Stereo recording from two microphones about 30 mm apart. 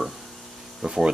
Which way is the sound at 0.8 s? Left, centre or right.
Right.